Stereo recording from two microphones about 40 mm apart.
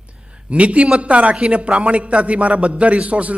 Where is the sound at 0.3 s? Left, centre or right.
Right.